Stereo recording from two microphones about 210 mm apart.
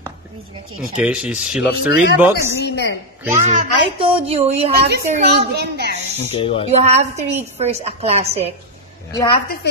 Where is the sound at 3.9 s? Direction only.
25° right (ahead or behind).